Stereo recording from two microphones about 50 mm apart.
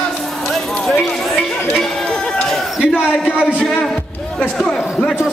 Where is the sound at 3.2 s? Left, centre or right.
Left.